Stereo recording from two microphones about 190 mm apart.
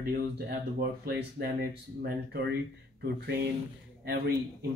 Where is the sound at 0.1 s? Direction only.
55° right (ahead or behind).